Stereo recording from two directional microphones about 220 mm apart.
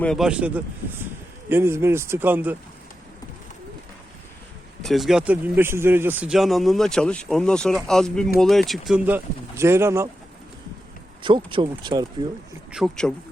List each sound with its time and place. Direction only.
0.0 s speech: centre (ahead or behind)
4.8 s speech: centre (ahead or behind)
11.2 s speech: 20° right (ahead or behind)
12.7 s speech: centre (ahead or behind)